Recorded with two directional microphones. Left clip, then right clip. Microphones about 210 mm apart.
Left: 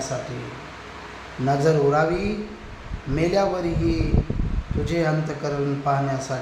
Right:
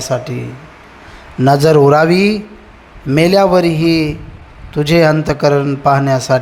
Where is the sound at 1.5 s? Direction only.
45° right (ahead or behind).